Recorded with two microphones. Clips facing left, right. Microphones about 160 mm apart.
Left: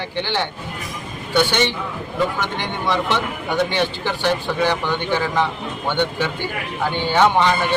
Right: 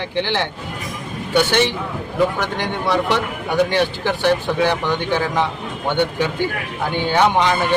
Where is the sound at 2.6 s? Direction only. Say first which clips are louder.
Right 3 dB; 10° right (ahead or behind).